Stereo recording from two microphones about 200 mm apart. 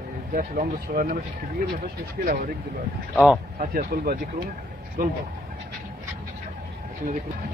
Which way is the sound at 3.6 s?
45° right (ahead or behind).